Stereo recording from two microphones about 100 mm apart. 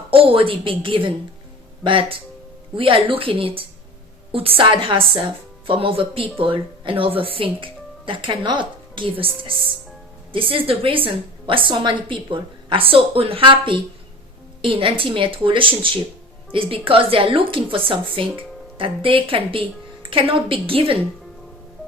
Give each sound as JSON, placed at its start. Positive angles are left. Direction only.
{"t": 0.1, "sound": "a woman's voice", "side_deg": -65}